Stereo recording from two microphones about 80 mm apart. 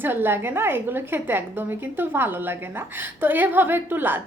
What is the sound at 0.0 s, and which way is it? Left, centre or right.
A woman's voice, right.